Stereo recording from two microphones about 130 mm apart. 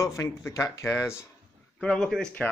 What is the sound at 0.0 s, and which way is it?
Speech, 25° left (ahead or behind).